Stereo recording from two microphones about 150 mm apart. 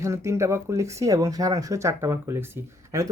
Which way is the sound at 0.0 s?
20° right (ahead or behind).